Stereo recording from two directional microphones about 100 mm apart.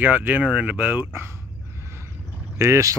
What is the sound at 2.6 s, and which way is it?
Speech, 30° right (ahead or behind).